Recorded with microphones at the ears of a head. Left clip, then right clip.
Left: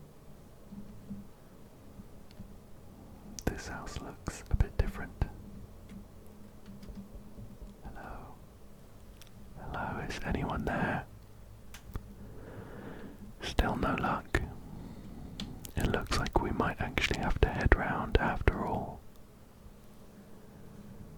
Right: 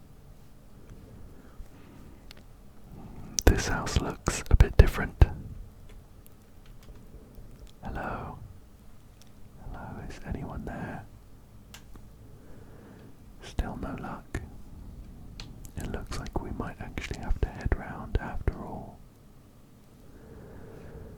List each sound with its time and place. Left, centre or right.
0.7 s a sound: left
3.0 s whispering: right
6.7 s insect: left
7.8 s whispering: right
9.6 s whispering: left
12.5 s a sound: left
13.4 s whispering: left
15.8 s whispering: left
20.3 s vehicle: right